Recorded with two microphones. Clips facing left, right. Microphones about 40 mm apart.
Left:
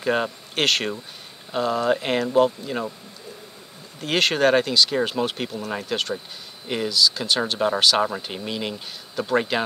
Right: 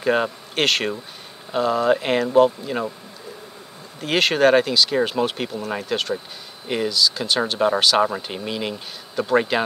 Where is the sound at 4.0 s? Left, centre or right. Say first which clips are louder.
Right 2 dB; centre.